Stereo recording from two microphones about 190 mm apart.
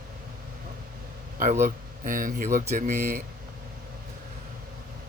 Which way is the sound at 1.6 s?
45° right (ahead or behind).